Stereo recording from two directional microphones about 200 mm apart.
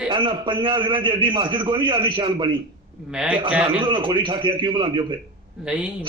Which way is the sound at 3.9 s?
25° right (ahead or behind).